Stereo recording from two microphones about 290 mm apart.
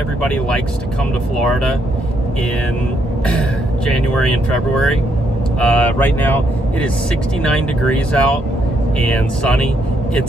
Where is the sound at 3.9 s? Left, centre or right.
Centre.